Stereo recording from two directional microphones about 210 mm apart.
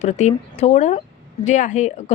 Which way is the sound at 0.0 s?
35° left (ahead or behind).